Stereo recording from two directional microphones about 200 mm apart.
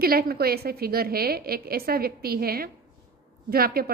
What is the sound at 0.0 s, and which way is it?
A woman's voice, 50° right (ahead or behind).